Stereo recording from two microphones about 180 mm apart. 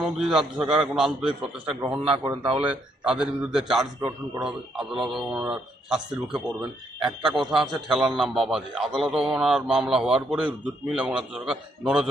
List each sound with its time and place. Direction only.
0.0 s a man's voice: 5° right (ahead or behind)
2.0 s speech: 30° right (ahead or behind)
2.6 s a man's voice: 5° right (ahead or behind)